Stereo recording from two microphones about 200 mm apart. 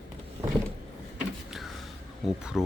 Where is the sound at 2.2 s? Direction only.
5° right (ahead or behind).